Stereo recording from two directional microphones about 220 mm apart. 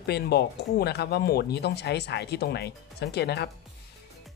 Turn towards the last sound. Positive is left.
turn(degrees=50)  # may be behind; listen again after turning